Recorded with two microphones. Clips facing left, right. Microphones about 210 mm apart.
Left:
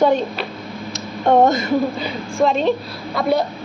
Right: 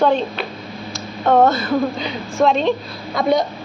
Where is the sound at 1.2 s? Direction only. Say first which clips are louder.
Even; 15° left (ahead or behind).